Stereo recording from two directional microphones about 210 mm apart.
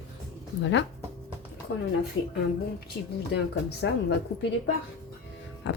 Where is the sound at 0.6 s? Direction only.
65° left (ahead or behind).